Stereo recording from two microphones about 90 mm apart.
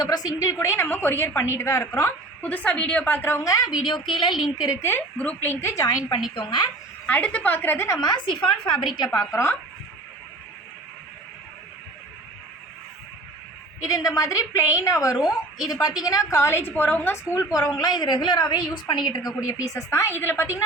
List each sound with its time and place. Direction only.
0.0 s a woman's voice: 45° left (ahead or behind)
0.6 s a woman's voice: 25° left (ahead or behind)
2.4 s a woman's voice: 20° left (ahead or behind); by 3.7 s 35° left (ahead or behind)
4.1 s speech: 60° left (ahead or behind)
4.4 s a woman's voice: 5° right (ahead or behind)
4.8 s a woman's voice: 25° left (ahead or behind)
5.1 s a woman's voice: 15° left (ahead or behind)
5.4 s a woman's voice: 25° left (ahead or behind)
6.3 s speech: 60° left (ahead or behind)
7.1 s a woman's voice: 15° left (ahead or behind)
8.4 s a woman's voice: 5° left (ahead or behind)
9.1 s a woman's voice: 35° left (ahead or behind)
13.8 s a woman's voice: 40° left (ahead or behind)
15.2 s a woman's voice: 50° left (ahead or behind); by 20.6 s 25° left (ahead or behind)